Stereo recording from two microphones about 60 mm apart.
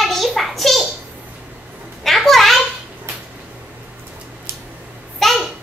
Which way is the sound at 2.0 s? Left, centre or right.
Centre.